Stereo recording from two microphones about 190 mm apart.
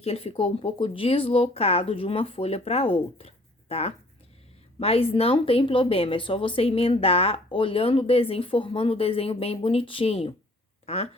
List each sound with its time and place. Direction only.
0.0 s speech: 30° left (ahead or behind)
3.2 s a sound: 35° left (ahead or behind)
4.8 s speech: 30° left (ahead or behind)